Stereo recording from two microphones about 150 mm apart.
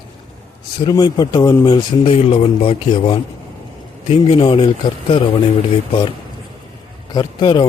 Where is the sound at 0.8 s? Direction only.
30° left (ahead or behind).